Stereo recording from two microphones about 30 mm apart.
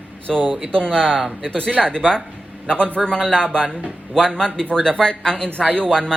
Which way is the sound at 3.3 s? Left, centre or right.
Left.